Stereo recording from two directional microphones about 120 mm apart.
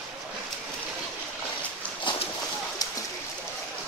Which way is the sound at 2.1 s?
40° left (ahead or behind).